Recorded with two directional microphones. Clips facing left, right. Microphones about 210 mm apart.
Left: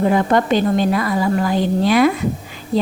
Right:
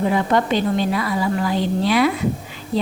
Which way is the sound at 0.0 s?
50° left (ahead or behind).